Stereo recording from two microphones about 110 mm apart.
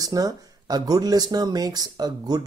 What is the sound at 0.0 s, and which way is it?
Speech, 35° right (ahead or behind).